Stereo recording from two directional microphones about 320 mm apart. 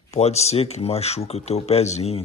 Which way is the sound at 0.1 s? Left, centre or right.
Centre.